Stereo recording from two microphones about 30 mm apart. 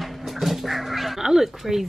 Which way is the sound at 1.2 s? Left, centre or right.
Centre.